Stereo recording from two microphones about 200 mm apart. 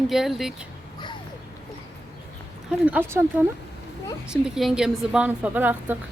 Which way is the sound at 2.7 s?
5° right (ahead or behind).